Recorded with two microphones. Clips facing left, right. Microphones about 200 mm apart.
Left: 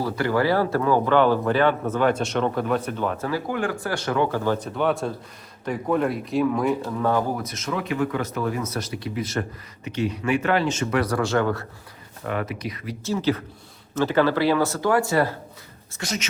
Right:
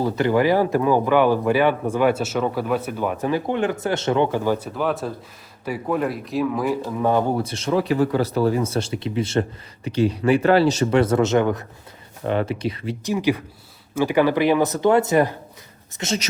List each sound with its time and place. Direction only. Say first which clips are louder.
0.0 s speech: right 4 dB; 20° right (ahead or behind); by 7.0 s 5° right (ahead or behind)
7.0 s speech: right 5 dB; 20° right (ahead or behind)
13.1 s speech: right 2 dB; 15° right (ahead or behind)